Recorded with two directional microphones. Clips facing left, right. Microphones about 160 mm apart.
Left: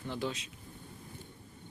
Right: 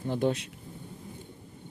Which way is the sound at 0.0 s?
50° right (ahead or behind).